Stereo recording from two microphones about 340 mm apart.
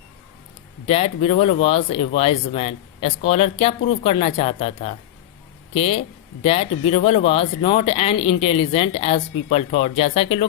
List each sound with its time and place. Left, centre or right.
0.9 s speech: centre